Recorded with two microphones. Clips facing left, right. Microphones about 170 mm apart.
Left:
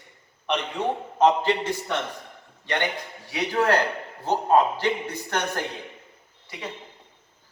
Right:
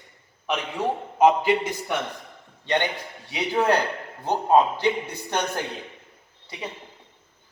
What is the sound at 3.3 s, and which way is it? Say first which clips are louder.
A man's voice: even; 15° right (ahead or behind).